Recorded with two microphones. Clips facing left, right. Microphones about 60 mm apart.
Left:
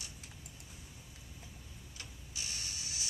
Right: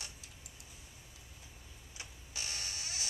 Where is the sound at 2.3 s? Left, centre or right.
Right.